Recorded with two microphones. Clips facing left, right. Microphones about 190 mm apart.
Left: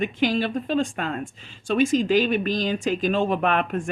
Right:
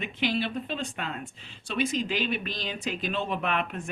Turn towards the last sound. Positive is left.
turn(degrees=45)  # may be behind; listen again after turning